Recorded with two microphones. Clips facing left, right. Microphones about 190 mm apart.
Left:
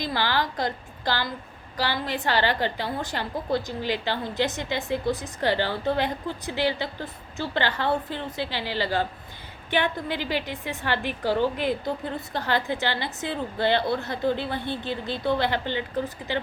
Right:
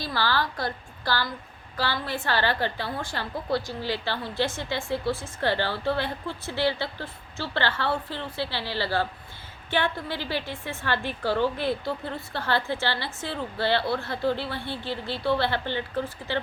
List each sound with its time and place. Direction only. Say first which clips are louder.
0.0 s a woman's voice: left 1 dB; 20° left (ahead or behind)